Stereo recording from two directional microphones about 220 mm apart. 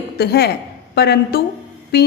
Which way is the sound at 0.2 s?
45° left (ahead or behind).